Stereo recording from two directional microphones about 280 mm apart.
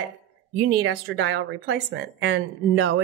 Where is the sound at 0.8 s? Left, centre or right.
Right.